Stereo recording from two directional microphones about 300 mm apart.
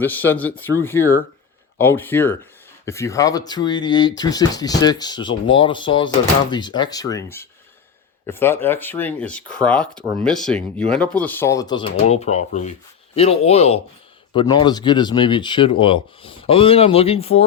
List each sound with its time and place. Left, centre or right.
0.0 s speech: centre